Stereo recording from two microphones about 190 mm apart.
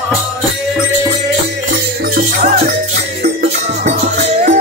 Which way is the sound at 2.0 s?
50° right (ahead or behind).